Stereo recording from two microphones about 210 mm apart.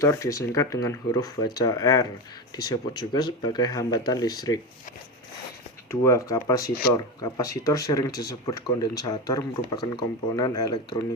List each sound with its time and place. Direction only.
0.0 s speech: 15° left (ahead or behind)
3.1 s speech: 20° left (ahead or behind)
5.9 s speech: 15° left (ahead or behind)